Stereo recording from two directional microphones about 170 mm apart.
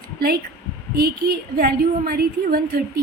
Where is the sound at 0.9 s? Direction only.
65° right (ahead or behind).